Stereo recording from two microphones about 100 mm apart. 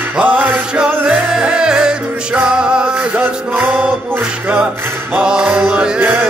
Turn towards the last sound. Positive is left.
turn(degrees=-15)  # may be behind; listen again after turning